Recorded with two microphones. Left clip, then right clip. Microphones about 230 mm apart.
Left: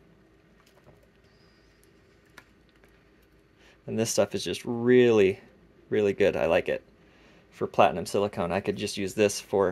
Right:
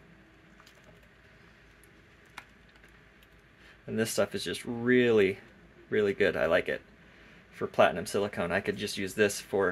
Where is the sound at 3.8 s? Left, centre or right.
Left.